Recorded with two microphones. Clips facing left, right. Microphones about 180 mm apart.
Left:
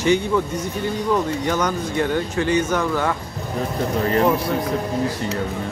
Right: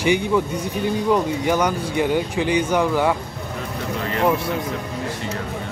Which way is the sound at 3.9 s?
40° left (ahead or behind).